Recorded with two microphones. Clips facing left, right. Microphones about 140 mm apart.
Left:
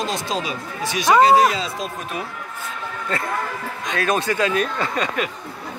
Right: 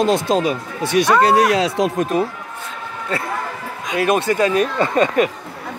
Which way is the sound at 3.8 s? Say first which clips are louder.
Right 4 dB; 10° right (ahead or behind).